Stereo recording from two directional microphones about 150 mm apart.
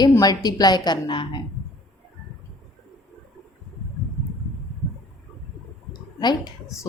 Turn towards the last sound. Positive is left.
turn(degrees=25)  # may be behind; listen again after turning